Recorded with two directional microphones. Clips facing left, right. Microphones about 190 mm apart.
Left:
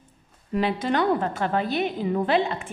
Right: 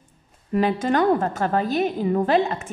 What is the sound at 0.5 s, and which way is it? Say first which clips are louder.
A woman's voice: right 3 dB; 45° right (ahead or behind).